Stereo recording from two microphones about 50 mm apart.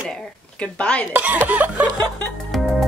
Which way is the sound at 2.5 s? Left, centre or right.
Centre.